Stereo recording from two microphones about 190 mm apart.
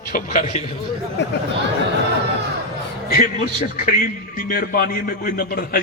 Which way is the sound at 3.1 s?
45° left (ahead or behind).